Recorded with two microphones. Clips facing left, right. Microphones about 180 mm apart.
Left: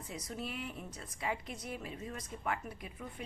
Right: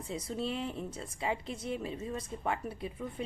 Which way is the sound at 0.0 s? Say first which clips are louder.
Right 6 dB; 30° right (ahead or behind).